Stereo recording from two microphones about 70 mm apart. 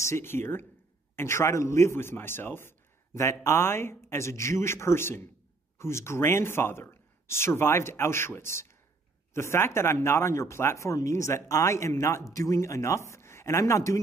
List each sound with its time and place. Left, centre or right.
0.0 s speech: left